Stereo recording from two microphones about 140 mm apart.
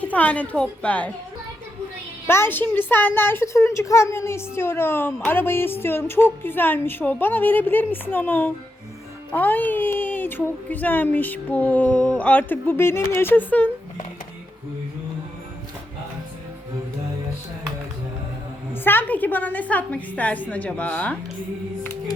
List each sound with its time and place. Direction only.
0.0 s speech: 10° left (ahead or behind)
2.2 s speech: 15° left (ahead or behind)
18.7 s speech: 15° left (ahead or behind)